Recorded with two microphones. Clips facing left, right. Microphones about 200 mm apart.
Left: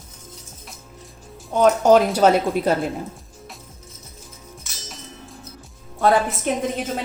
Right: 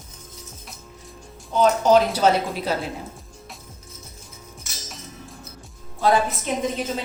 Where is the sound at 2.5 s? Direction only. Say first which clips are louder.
Left 6 dB; 50° left (ahead or behind).